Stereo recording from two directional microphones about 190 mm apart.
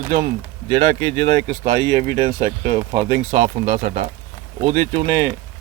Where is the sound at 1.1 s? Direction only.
55° right (ahead or behind).